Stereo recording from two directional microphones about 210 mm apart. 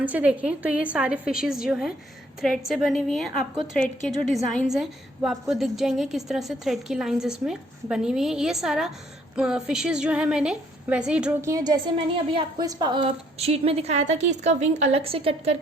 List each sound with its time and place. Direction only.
0.0 s a woman's voice: 5° right (ahead or behind); by 15.5 s 25° right (ahead or behind)